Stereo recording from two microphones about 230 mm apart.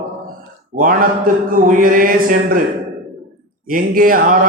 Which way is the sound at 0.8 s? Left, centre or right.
Right.